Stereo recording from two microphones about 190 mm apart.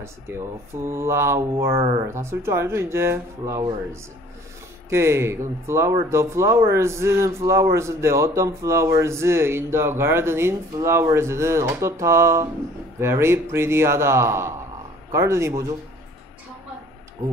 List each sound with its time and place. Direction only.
0.8 s speech: 15° right (ahead or behind)